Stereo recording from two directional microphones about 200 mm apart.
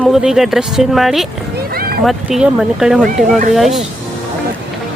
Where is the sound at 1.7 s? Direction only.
50° right (ahead or behind).